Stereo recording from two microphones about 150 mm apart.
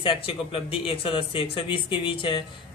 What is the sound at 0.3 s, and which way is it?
Speech, 35° left (ahead or behind).